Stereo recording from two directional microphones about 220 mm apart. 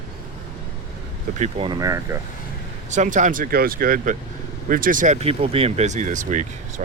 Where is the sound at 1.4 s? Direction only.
25° right (ahead or behind).